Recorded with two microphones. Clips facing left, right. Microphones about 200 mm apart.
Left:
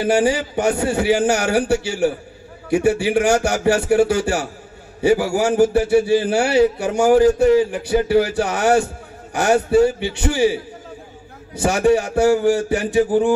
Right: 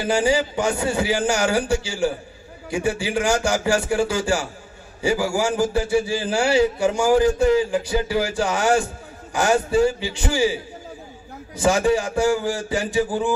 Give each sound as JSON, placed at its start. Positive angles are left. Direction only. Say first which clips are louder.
{"t": 0.0, "sound": "a man's voice", "louder": "left 3 dB", "side_deg": 60}
{"t": 11.6, "sound": "a man's voice", "louder": "left 3 dB", "side_deg": 65}